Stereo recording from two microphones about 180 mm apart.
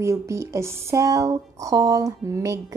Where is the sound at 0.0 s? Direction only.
15° right (ahead or behind).